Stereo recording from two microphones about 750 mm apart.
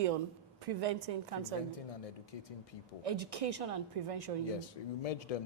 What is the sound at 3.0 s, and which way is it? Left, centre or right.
A woman's voice, right.